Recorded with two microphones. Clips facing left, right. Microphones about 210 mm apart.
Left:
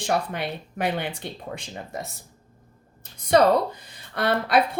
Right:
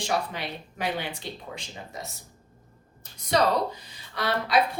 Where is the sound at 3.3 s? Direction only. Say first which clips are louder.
Left 5 dB; 55° left (ahead or behind).